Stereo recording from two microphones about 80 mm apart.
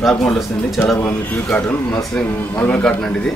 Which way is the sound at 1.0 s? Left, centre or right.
Left.